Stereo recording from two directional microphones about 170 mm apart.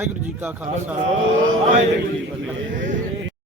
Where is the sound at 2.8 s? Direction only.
50° right (ahead or behind).